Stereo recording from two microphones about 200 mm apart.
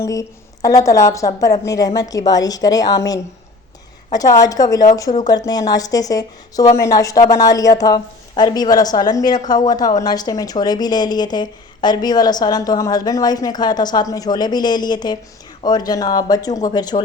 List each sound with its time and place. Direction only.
0.0 s a woman's voice: 15° left (ahead or behind)
4.1 s a woman's voice: 20° left (ahead or behind)